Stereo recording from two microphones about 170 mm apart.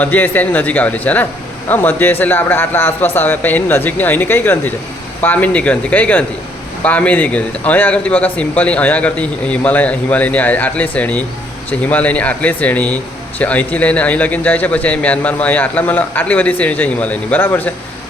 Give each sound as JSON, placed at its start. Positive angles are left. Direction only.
{"t": 0.0, "sound": "a man's voice", "side_deg": 10}